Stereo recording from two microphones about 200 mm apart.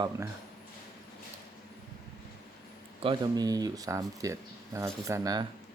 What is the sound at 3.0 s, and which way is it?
Speech, 20° right (ahead or behind).